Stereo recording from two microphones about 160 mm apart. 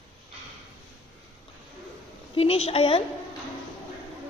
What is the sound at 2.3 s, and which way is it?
Speech, 40° left (ahead or behind).